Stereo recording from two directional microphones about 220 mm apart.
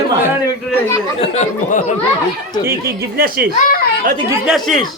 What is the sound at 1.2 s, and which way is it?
Speech, 30° left (ahead or behind).